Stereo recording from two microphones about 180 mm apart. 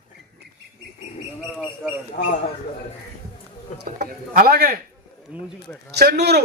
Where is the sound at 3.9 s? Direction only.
55° right (ahead or behind).